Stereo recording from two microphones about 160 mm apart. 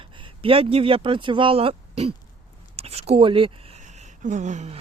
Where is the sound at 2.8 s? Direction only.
40° right (ahead or behind).